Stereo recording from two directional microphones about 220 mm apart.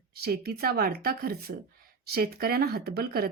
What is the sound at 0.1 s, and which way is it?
A woman's voice, 45° right (ahead or behind).